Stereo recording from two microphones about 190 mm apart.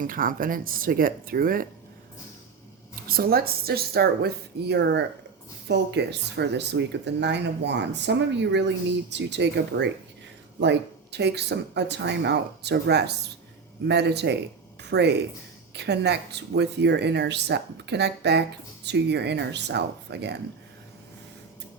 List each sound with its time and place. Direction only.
0.0 s speech: 45° right (ahead or behind)
3.1 s speech: 50° right (ahead or behind)